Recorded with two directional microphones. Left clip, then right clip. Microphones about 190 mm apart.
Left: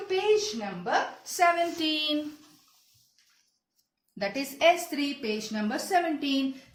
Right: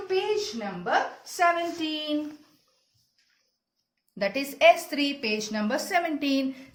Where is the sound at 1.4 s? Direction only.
5° right (ahead or behind).